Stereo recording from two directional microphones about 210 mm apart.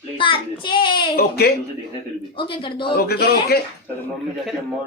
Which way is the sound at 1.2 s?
50° left (ahead or behind).